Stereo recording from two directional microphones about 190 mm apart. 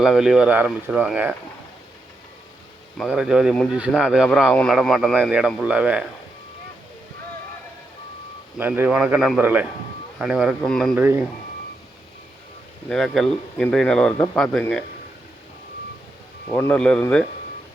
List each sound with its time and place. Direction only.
0.0 s speech: centre (ahead or behind)
3.1 s speech: 5° right (ahead or behind)
8.5 s a man's voice: 10° right (ahead or behind)
10.9 s a man's voice: 10° right (ahead or behind)
12.9 s speech: centre (ahead or behind)
16.5 s speech: 10° left (ahead or behind)